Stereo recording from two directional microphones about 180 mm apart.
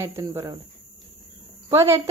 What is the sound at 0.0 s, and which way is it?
Speech, 15° right (ahead or behind).